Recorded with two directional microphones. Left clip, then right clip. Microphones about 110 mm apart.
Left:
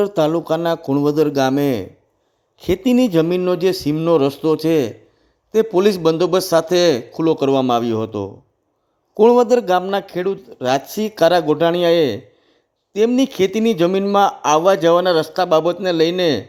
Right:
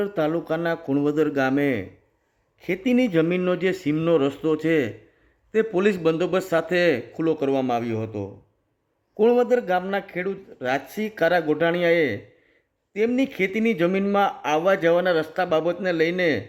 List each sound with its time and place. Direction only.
0.0 s speech: 40° left (ahead or behind)
0.8 s speech: 20° left (ahead or behind)
1.4 s speech: 40° left (ahead or behind)
4.1 s speech: 40° left (ahead or behind)